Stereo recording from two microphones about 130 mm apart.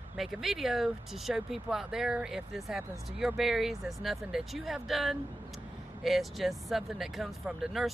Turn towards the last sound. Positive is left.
turn(degrees=0)  # may be behind; listen again after turning